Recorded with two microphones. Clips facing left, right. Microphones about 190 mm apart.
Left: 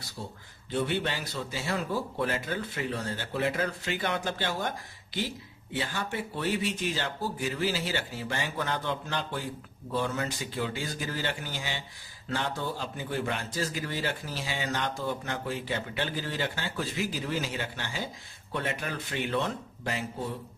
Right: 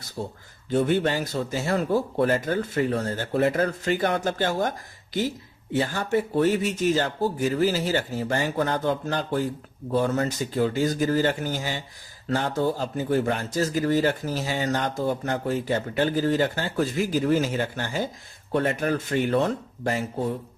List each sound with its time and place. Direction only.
0.2 s a man's voice: 45° right (ahead or behind)
5.7 s a man's voice: 45° right (ahead or behind)